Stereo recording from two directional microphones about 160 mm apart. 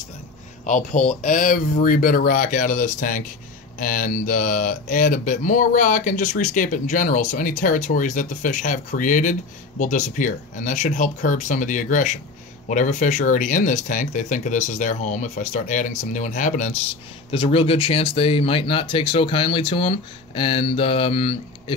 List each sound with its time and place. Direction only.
0.7 s speech: 50° left (ahead or behind)
17.3 s speech: 35° left (ahead or behind)